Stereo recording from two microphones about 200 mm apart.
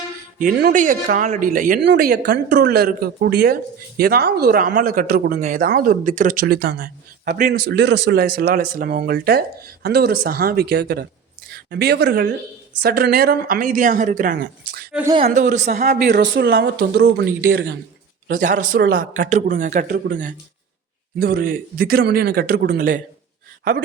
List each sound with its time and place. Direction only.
0.3 s speech: 45° right (ahead or behind)
1.8 s speech: 55° right (ahead or behind)
7.5 s speech: 60° right (ahead or behind)
15.1 s speech: 35° right (ahead or behind)
15.6 s speech: 50° right (ahead or behind)
18.3 s speech: 40° right (ahead or behind)
21.2 s speech: 45° right (ahead or behind)